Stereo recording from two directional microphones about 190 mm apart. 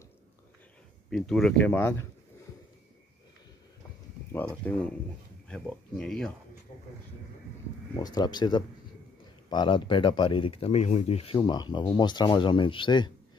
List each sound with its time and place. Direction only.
1.1 s speech: 5° left (ahead or behind)
4.6 s speech: 10° left (ahead or behind)
7.9 s speech: 20° left (ahead or behind)
11.3 s speech: 20° left (ahead or behind)